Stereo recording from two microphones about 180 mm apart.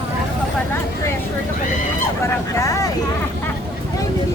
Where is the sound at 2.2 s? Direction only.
15° left (ahead or behind).